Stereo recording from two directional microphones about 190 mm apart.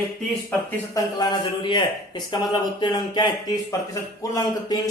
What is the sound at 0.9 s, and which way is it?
A man's voice, 20° left (ahead or behind).